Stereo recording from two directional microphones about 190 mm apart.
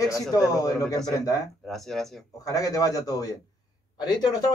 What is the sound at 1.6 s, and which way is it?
Speech, centre (ahead or behind).